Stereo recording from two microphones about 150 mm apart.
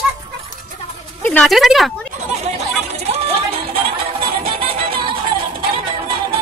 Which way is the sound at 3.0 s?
40° right (ahead or behind).